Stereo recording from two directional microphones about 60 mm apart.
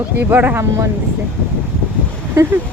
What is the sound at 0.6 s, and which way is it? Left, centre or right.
Speech, right.